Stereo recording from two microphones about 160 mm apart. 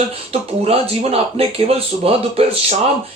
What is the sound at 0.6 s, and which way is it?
Speech, 40° right (ahead or behind).